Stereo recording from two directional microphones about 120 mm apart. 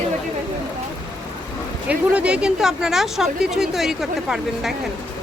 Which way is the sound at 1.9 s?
10° right (ahead or behind).